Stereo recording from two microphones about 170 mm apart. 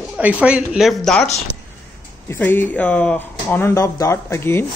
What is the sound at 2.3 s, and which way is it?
Speech, 10° left (ahead or behind).